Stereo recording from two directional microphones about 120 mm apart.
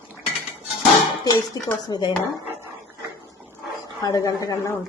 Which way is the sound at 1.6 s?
35° left (ahead or behind).